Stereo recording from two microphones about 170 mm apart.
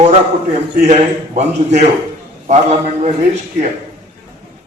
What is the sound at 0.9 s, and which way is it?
A man's voice, 40° right (ahead or behind).